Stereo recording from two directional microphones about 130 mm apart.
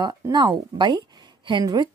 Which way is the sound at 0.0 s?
35° right (ahead or behind).